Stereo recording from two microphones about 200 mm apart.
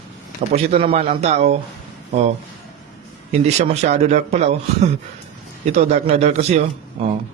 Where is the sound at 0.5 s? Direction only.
30° right (ahead or behind).